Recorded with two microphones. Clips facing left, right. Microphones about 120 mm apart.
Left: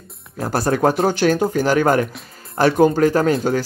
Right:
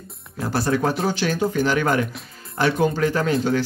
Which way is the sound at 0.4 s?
45° left (ahead or behind).